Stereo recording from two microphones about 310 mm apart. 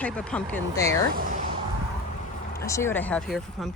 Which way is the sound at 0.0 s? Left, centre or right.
Centre.